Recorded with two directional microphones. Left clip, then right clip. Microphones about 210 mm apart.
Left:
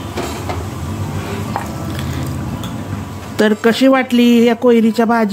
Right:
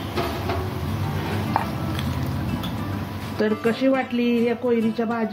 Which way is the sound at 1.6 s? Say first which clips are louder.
Even; centre (ahead or behind).